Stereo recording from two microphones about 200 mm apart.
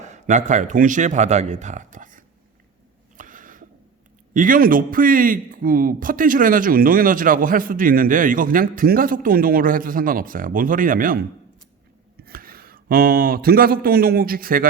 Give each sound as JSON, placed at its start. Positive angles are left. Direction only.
{"t": 0.0, "sound": "speech", "side_deg": -35}
{"t": 3.2, "sound": "a sound", "side_deg": -40}
{"t": 4.4, "sound": "a man's voice", "side_deg": -45}